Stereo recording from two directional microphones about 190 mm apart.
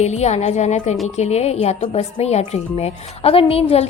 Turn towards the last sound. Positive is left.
turn(degrees=30)  # may be behind; listen again after turning